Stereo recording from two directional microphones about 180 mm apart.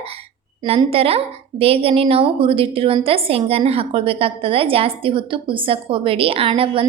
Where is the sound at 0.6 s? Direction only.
30° right (ahead or behind).